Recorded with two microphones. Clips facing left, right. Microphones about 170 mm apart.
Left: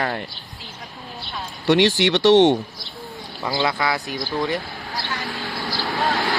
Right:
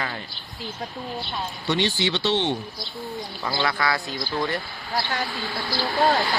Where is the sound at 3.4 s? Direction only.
15° left (ahead or behind).